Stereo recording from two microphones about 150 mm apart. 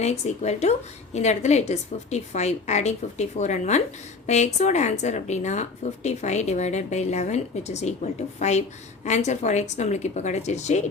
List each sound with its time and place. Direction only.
0.0 s speech: 45° left (ahead or behind)